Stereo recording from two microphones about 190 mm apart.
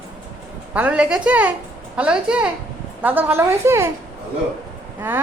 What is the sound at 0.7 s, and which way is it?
A woman's voice, 5° right (ahead or behind).